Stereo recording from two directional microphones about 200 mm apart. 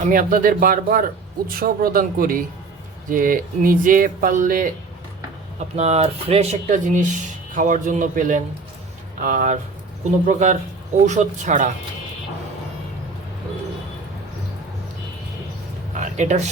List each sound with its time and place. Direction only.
0.0 s speech: 45° right (ahead or behind)
16.1 s speech: 35° right (ahead or behind)